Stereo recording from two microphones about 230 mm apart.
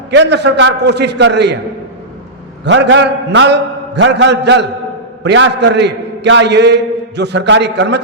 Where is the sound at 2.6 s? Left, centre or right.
Right.